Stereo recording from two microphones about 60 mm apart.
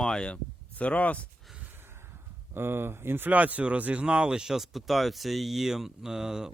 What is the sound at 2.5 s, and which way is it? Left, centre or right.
Speech, right.